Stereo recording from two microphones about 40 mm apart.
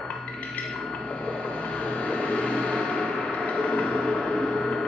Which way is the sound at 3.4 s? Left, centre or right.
Left.